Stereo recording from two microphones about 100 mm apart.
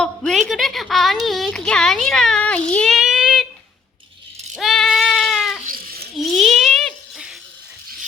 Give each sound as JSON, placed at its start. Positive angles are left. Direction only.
{"t": 0.0, "sound": "a woman's voice", "side_deg": 5}
{"t": 3.0, "sound": "child singing", "side_deg": -5}
{"t": 4.5, "sound": "goat", "side_deg": 0}
{"t": 6.1, "sound": "a sound", "side_deg": 0}